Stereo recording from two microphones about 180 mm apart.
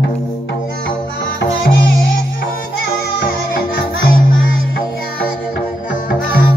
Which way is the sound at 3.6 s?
55° left (ahead or behind).